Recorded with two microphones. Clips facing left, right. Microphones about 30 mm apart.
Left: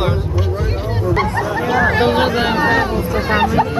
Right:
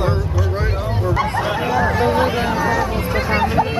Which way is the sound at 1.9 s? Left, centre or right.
Left.